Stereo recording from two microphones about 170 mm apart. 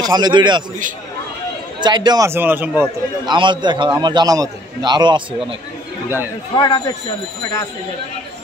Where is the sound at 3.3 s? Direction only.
25° right (ahead or behind).